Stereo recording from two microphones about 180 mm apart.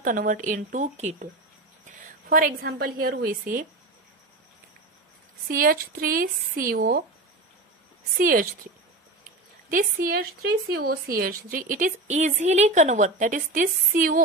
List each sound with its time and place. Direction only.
0.0 s a woman's voice: 50° right (ahead or behind)
5.5 s a woman's voice: 50° right (ahead or behind)
8.2 s a woman's voice: 50° right (ahead or behind)
9.7 s a woman's voice: 50° right (ahead or behind)